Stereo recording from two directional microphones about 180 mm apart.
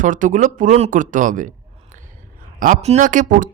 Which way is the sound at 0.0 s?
45° right (ahead or behind).